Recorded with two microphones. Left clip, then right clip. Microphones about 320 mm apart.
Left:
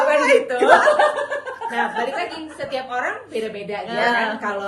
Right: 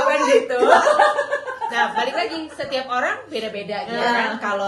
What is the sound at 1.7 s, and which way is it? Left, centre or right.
Chuckle, centre.